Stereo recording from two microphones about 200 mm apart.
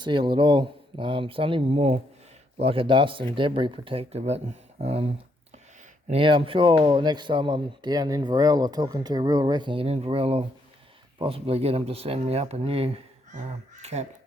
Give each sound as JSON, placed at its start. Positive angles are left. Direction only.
{"t": 0.0, "sound": "speech", "side_deg": -20}